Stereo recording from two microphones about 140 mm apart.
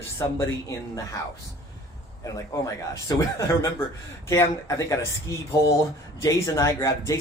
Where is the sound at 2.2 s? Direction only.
20° left (ahead or behind).